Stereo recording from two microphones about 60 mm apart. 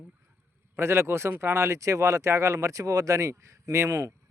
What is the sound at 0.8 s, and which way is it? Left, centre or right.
Speech, right.